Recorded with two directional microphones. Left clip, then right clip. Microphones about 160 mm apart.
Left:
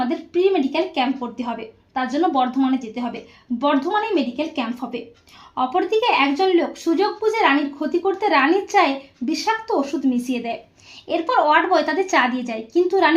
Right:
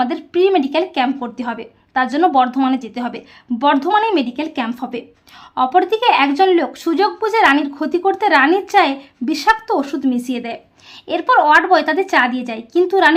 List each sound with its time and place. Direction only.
0.1 s a woman's voice: 30° right (ahead or behind)